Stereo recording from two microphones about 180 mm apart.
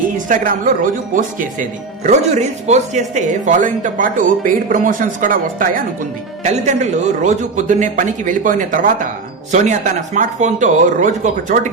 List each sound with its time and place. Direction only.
0.3 s speech: 50° right (ahead or behind)